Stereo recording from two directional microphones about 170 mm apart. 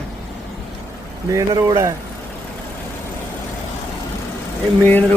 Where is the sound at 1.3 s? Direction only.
20° right (ahead or behind).